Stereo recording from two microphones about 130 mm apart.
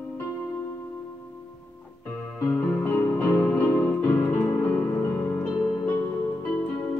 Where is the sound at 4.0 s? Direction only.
15° left (ahead or behind).